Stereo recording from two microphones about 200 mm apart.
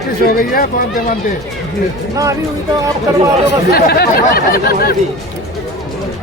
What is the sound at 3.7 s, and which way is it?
Speech, 50° left (ahead or behind).